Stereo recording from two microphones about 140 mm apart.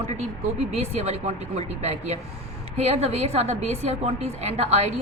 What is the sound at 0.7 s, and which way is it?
A woman's voice, 50° right (ahead or behind).